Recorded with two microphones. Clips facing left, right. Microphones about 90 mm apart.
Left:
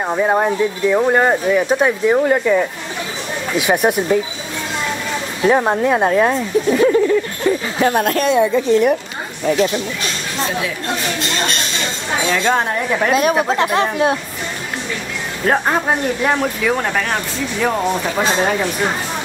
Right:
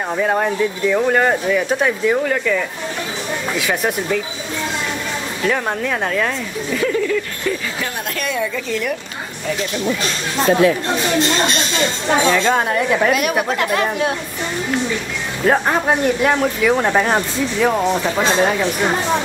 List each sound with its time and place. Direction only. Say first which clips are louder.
0.1 s speech: left 2 dB; 15° left (ahead or behind)
5.4 s speech: left 6 dB; 25° left (ahead or behind)
7.8 s speech: left 10 dB; 45° left (ahead or behind)
8.2 s speech: left 5 dB; 30° left (ahead or behind)
12.3 s speech: left 3 dB; centre (ahead or behind)
13.1 s speech: left 3 dB; 30° left (ahead or behind)
15.4 s speech: right 1 dB; centre (ahead or behind)
16.8 s speech: right 4 dB; 20° right (ahead or behind)
17.6 s speech: right 1 dB; centre (ahead or behind)